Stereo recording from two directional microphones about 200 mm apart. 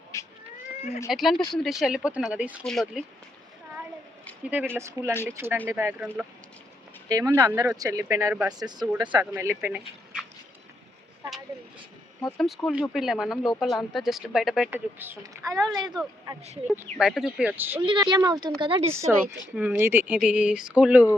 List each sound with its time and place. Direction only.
0.1 s cat: 15° left (ahead or behind)
1.0 s speech: centre (ahead or behind)
4.4 s speech: 10° right (ahead or behind)
7.1 s speech: 20° right (ahead or behind)
8.5 s speech: 20° right (ahead or behind)
12.4 s speech: centre (ahead or behind); by 15.8 s 15° right (ahead or behind)
16.6 s speech: 5° right (ahead or behind)
17.8 s speech: 25° right (ahead or behind)
19.5 s speech: 10° right (ahead or behind)